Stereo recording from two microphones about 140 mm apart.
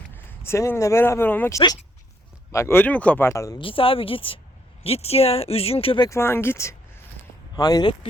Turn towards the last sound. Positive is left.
turn(degrees=25)  # may be behind; listen again after turning